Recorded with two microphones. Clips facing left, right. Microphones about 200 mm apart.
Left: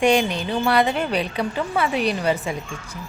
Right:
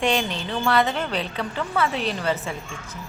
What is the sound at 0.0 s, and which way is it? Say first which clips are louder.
A woman's voice: left 5 dB; 15° left (ahead or behind).